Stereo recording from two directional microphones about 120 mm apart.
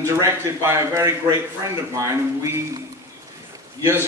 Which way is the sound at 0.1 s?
25° right (ahead or behind).